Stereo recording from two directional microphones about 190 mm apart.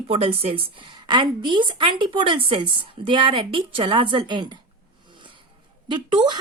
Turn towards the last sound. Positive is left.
turn(degrees=-25)  # may be behind; listen again after turning